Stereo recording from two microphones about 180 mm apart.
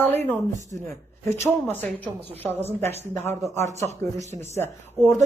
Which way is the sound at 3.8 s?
40° right (ahead or behind).